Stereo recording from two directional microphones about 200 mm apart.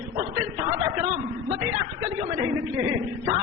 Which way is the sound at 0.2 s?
25° right (ahead or behind).